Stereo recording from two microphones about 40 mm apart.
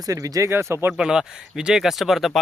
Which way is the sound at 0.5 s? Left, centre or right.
Right.